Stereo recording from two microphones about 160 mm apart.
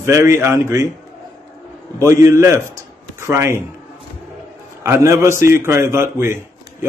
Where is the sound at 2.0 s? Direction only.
20° right (ahead or behind).